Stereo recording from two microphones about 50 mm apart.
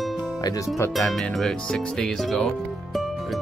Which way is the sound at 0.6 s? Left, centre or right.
Left.